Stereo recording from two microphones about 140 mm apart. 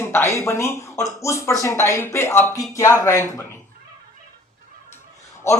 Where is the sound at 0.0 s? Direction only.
15° left (ahead or behind).